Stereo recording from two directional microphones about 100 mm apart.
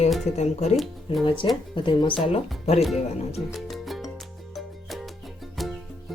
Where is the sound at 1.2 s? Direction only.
55° left (ahead or behind).